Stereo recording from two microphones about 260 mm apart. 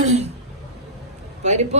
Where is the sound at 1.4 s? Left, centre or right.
Right.